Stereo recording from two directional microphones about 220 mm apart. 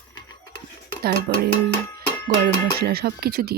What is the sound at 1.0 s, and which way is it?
Speech, 45° right (ahead or behind).